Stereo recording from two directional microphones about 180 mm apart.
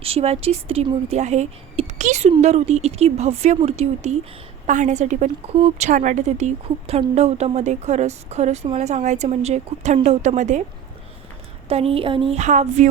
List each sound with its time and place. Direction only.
0.0 s a woman's voice: 35° right (ahead or behind)
11.7 s a woman's voice: 35° right (ahead or behind)